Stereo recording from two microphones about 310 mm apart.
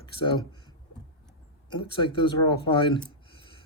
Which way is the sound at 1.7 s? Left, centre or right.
Centre.